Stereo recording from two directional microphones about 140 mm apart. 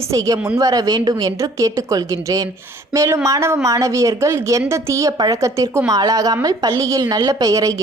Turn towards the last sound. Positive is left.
turn(degrees=-25)  # may be behind; listen again after turning